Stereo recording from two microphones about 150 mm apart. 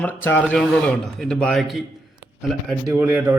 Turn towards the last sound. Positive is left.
turn(degrees=-10)  # may be behind; listen again after turning